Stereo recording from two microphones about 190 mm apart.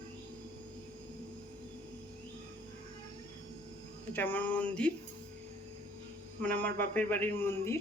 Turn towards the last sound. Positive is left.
turn(degrees=15)  # may be behind; listen again after turning